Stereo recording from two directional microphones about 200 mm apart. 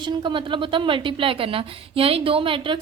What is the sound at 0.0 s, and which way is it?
A woman's voice, 25° right (ahead or behind).